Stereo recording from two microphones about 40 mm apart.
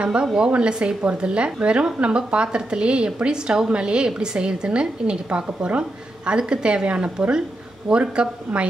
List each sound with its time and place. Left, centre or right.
0.0 s a woman's voice: right